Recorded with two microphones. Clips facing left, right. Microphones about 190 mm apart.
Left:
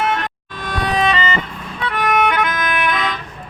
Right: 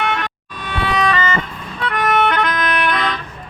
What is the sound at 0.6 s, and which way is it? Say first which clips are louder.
Music: left 1 dB; 40° left (ahead or behind).